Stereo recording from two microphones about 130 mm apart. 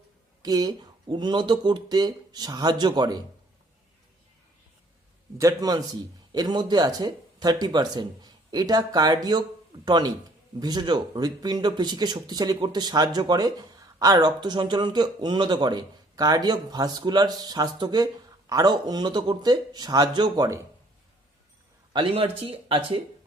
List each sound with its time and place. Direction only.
0.4 s speech: 30° right (ahead or behind)
5.4 s a man's voice: 25° right (ahead or behind)
21.9 s speech: 45° right (ahead or behind)